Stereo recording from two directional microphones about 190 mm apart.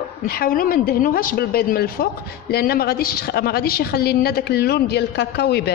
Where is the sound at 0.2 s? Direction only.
50° left (ahead or behind).